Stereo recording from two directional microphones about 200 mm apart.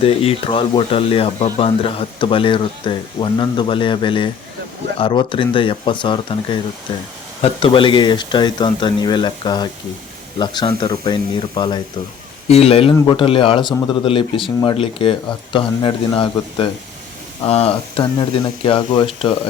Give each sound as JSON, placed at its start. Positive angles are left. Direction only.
{"t": 0.0, "sound": "speech", "side_deg": 30}